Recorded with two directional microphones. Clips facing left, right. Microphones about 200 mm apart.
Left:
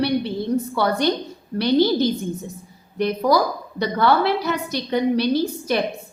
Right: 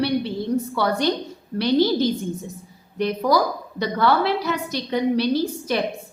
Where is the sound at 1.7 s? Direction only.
55° left (ahead or behind).